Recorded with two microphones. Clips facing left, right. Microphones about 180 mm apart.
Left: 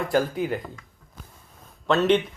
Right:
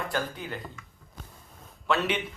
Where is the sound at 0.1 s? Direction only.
40° left (ahead or behind).